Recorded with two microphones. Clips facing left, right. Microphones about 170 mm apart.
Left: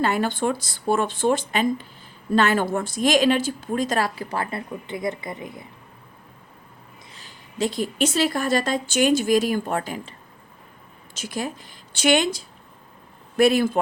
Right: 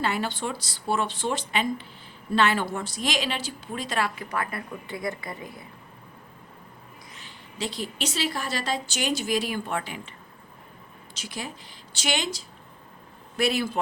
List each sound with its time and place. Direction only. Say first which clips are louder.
0.0 s a woman's voice: left 6 dB; 45° left (ahead or behind); by 5.6 s 20° left (ahead or behind)
7.1 s a woman's voice: even; 40° left (ahead or behind)